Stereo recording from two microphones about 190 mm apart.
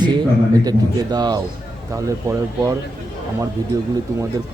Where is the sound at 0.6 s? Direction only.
20° right (ahead or behind).